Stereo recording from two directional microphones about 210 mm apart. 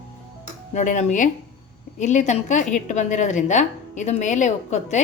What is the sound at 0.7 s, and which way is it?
A woman's voice, 35° left (ahead or behind).